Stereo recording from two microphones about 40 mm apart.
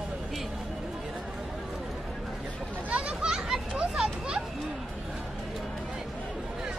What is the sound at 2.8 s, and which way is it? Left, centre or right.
Children playing, right.